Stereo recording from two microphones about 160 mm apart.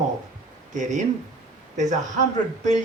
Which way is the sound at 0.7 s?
50° right (ahead or behind).